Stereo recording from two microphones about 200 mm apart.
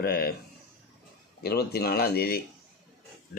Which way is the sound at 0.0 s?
50° left (ahead or behind).